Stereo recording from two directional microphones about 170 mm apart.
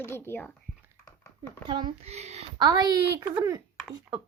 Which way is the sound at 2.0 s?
40° right (ahead or behind).